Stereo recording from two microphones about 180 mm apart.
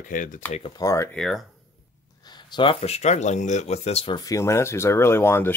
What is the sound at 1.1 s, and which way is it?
Speech, centre (ahead or behind).